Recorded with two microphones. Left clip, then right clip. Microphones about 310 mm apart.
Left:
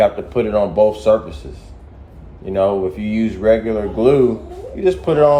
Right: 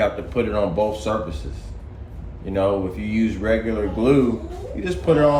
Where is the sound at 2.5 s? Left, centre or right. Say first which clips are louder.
Left 5 dB; centre.